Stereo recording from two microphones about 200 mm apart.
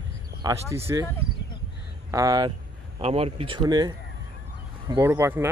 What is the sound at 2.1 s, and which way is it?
Speech, 20° right (ahead or behind).